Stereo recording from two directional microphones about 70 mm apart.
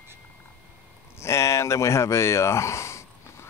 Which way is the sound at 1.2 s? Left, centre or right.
Left.